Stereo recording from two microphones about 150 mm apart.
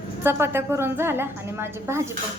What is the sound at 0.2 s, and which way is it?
A woman's voice, 15° right (ahead or behind).